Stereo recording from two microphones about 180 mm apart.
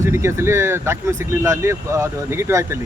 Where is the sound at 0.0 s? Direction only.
15° right (ahead or behind).